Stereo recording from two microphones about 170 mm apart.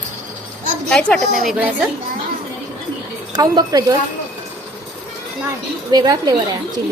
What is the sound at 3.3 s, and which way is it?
Speech, 25° right (ahead or behind).